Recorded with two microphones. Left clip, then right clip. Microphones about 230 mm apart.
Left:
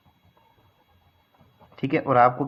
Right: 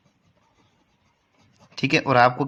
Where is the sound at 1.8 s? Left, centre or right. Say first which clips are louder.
Right 1 dB; right.